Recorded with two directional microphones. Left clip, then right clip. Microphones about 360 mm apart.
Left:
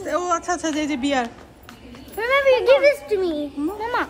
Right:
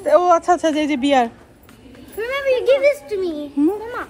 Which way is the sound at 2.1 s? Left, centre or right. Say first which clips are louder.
Left 2 dB; centre.